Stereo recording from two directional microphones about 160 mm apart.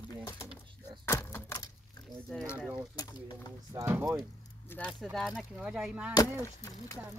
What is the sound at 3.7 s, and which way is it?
Speech, 15° right (ahead or behind).